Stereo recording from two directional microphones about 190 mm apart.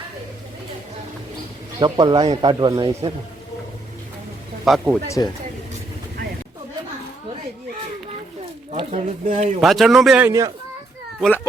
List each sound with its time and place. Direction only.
1.8 s speech: 25° right (ahead or behind)
4.6 s a man's voice: centre (ahead or behind)
5.0 s speech: 15° left (ahead or behind)
8.7 s speech: 30° right (ahead or behind)
9.6 s a man's voice: centre (ahead or behind)